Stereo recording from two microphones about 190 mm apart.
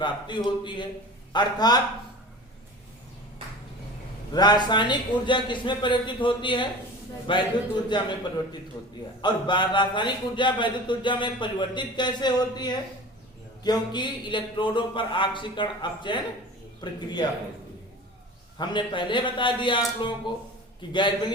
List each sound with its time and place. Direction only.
0.0 s a man's voice: 25° left (ahead or behind)
4.3 s a man's voice: 20° left (ahead or behind)
18.5 s a man's voice: 25° left (ahead or behind)